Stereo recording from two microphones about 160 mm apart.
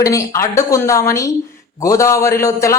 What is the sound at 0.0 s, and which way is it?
A man's voice, 20° left (ahead or behind).